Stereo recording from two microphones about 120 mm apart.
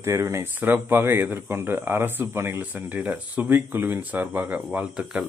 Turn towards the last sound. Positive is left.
turn(degrees=-5)  # may be behind; listen again after turning